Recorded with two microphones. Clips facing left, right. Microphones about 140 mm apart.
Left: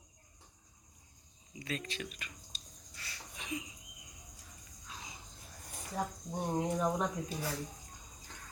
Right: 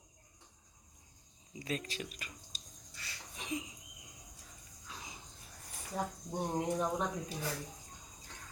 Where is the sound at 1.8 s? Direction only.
40° right (ahead or behind).